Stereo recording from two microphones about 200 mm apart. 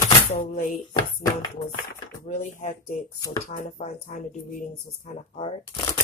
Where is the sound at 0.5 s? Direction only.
40° left (ahead or behind).